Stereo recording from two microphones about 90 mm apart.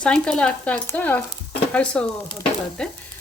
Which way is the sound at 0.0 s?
10° left (ahead or behind).